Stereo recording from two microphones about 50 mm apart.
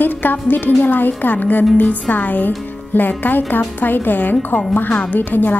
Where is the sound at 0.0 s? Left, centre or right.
Left.